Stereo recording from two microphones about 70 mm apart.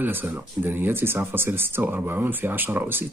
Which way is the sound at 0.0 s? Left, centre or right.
Right.